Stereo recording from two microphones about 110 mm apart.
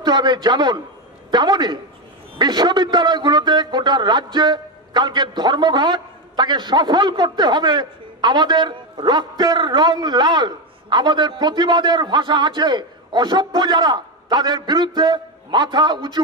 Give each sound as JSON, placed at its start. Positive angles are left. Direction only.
{"t": 0.0, "sound": "a man's voice", "side_deg": -40}